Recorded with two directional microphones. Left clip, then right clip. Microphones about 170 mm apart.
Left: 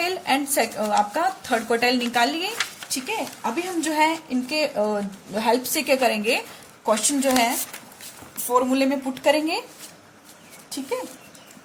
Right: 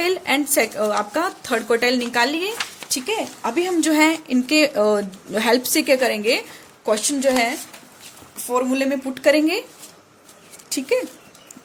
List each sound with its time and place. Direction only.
0.0 s a woman's voice: 35° right (ahead or behind)
2.9 s a woman's voice: 45° right (ahead or behind); by 9.6 s 30° right (ahead or behind)